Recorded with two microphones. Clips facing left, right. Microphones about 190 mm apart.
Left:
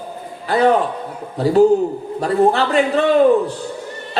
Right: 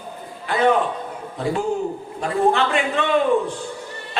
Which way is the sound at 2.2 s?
35° left (ahead or behind).